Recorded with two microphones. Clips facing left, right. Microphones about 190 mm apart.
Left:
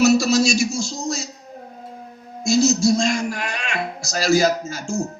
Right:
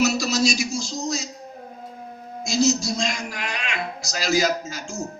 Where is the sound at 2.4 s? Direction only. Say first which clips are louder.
Left 4 dB; 50° left (ahead or behind).